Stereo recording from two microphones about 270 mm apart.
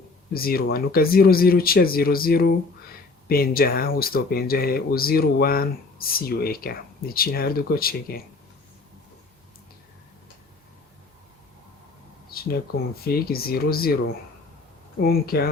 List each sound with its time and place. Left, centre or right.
0.3 s speech: left
12.3 s a sound: left
13.2 s speech: left
15.0 s speech: left